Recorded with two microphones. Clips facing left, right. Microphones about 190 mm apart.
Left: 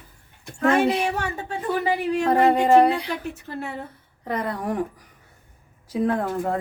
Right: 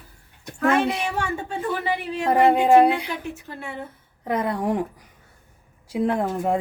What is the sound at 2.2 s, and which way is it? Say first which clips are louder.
Speech: right 2 dB; 10° right (ahead or behind).